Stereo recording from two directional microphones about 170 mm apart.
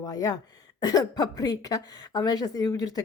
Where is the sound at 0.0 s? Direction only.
20° left (ahead or behind).